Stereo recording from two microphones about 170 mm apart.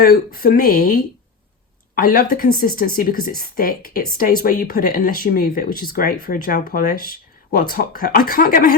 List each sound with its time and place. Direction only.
0.0 s speech: 60° left (ahead or behind)